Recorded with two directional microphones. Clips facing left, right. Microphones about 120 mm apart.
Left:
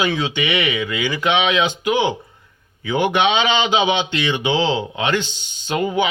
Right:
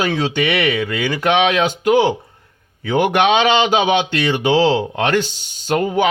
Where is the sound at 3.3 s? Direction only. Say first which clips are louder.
Right 4 dB; 45° right (ahead or behind).